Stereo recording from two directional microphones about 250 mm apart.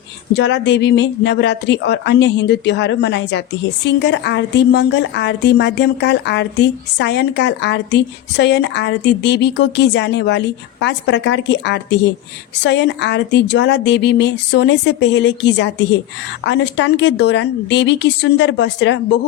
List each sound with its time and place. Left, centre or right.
0.3 s speech: left